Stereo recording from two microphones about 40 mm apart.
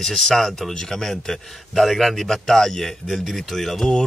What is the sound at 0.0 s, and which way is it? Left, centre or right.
Speech, centre.